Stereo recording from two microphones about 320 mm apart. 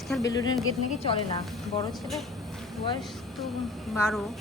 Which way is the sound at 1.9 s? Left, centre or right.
Centre.